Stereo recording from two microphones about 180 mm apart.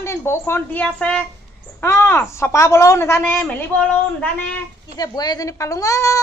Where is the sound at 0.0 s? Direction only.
15° left (ahead or behind).